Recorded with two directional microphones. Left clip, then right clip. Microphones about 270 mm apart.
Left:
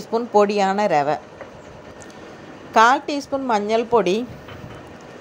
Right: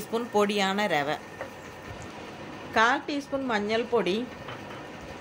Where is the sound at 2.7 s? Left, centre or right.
Centre.